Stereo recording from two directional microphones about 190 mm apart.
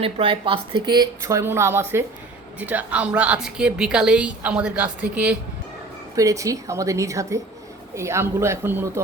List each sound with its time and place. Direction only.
0.0 s a woman's voice: 30° right (ahead or behind); by 5.4 s 5° right (ahead or behind)
6.1 s a woman's voice: 15° right (ahead or behind)